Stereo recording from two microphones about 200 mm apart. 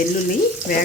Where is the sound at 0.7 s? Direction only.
45° left (ahead or behind).